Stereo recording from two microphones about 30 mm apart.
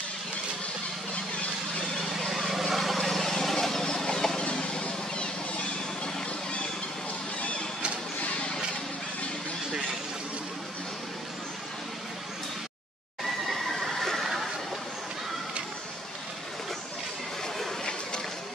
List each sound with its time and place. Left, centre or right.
2.0 s vehicle: centre
3.1 s vehicle: centre
3.6 s chicken: centre
4.5 s vehicle: left
7.3 s a sound: left
13.8 s a sound: centre